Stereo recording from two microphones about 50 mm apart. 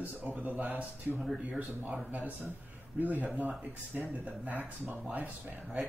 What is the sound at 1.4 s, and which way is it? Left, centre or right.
Speech, right.